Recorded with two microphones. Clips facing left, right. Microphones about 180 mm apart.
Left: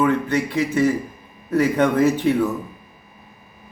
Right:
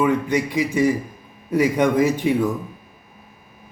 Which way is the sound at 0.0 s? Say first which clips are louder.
Even; 10° right (ahead or behind).